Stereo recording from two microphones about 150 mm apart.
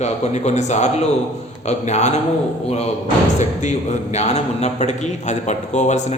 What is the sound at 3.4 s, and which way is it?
Speech, 50° left (ahead or behind).